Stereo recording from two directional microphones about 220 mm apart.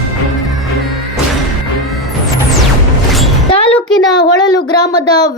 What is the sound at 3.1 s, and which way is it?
Music, centre (ahead or behind).